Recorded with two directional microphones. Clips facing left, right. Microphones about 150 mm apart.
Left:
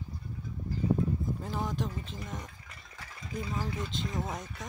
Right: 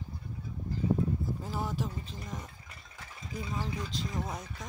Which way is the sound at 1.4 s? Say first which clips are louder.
Left 1 dB; 5° right (ahead or behind).